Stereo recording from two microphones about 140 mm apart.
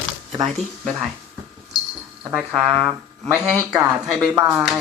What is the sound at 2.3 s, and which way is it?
Speech, 5° right (ahead or behind).